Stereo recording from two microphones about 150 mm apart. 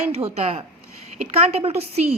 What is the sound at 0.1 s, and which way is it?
A woman's voice, 45° right (ahead or behind).